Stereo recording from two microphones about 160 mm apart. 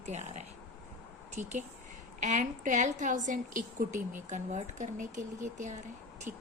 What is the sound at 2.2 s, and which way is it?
A woman's voice, 50° right (ahead or behind).